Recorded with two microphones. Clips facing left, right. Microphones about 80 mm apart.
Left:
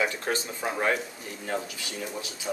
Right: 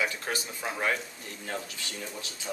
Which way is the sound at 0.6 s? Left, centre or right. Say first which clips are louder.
Left 2 dB; centre.